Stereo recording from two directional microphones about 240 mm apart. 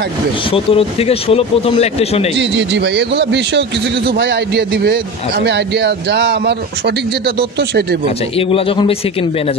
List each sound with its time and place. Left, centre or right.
0.5 s speech: left
2.3 s a man's voice: right
7.5 s a man's voice: right
8.4 s speech: left